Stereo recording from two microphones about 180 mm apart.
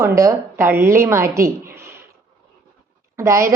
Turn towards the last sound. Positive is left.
turn(degrees=-15)  # may be behind; listen again after turning